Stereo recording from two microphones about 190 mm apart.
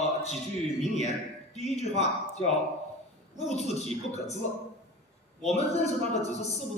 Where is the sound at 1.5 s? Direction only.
35° left (ahead or behind).